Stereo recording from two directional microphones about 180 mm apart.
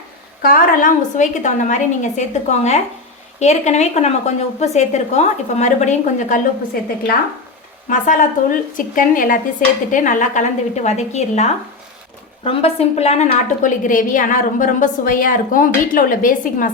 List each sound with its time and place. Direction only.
0.4 s a woman's voice: 50° left (ahead or behind)
7.9 s a woman's voice: 45° left (ahead or behind)